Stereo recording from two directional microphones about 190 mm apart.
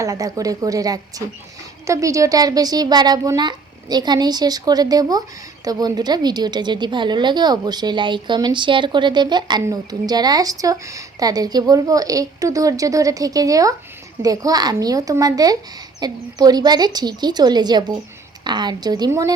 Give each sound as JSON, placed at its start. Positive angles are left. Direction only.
{"t": 0.0, "sound": "a woman's voice", "side_deg": -15}